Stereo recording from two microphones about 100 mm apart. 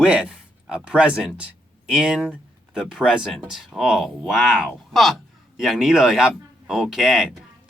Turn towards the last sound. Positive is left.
turn(degrees=-5)  # may be behind; listen again after turning